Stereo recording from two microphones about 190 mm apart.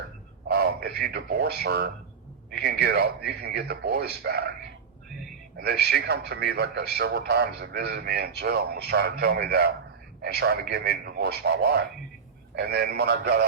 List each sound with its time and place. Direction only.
0.4 s a man's voice: 55° right (ahead or behind)
5.5 s a man's voice: 55° right (ahead or behind)